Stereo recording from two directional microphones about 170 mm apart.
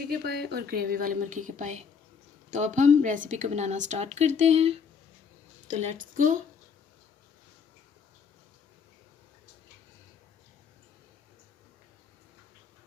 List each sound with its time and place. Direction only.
0.1 s a woman's voice: 70° right (ahead or behind); by 6.4 s 50° right (ahead or behind)